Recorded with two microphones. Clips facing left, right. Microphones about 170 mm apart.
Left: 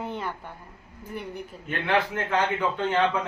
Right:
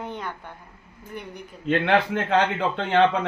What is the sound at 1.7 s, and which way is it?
Speech, 75° right (ahead or behind).